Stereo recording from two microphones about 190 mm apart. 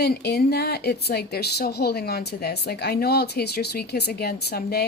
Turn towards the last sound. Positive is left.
turn(degrees=55)  # may be behind; listen again after turning